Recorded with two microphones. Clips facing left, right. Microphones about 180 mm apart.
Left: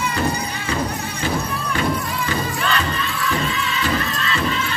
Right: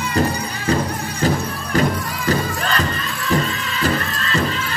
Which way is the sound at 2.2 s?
40° right (ahead or behind).